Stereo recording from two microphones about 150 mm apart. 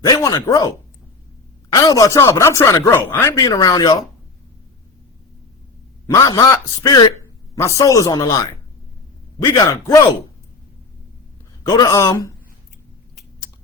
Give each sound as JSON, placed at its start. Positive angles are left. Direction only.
{"t": 0.0, "sound": "speech", "side_deg": 25}
{"t": 1.7, "sound": "speech", "side_deg": 25}
{"t": 3.3, "sound": "speech", "side_deg": 25}
{"t": 6.1, "sound": "speech", "side_deg": 25}
{"t": 9.4, "sound": "speech", "side_deg": 20}
{"t": 11.6, "sound": "speech", "side_deg": 25}